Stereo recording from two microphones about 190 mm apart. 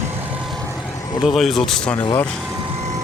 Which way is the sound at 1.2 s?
Centre (ahead or behind).